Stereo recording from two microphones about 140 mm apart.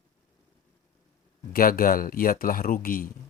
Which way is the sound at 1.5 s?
90° left.